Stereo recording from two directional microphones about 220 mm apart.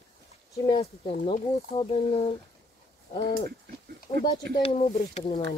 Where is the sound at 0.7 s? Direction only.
25° left (ahead or behind).